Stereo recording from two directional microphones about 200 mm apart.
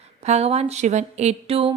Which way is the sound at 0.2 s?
35° right (ahead or behind).